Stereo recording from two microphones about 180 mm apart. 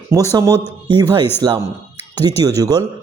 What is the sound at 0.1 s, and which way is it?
A man's voice, 20° right (ahead or behind).